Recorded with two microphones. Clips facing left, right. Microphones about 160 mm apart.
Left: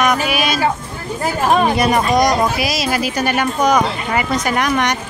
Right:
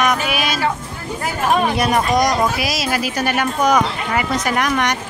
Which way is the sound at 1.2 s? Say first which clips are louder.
Left 3 dB; 35° left (ahead or behind).